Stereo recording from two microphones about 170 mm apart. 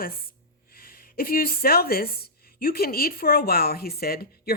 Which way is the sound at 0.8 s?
60° left (ahead or behind).